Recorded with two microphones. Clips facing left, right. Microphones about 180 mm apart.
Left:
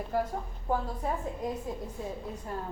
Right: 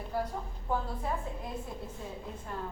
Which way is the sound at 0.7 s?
40° left (ahead or behind).